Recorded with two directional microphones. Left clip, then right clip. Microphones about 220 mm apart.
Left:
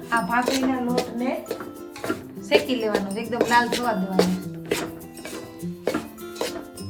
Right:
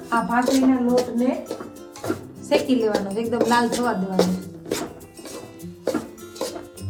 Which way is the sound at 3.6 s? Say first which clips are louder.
Right 1 dB; 25° left (ahead or behind).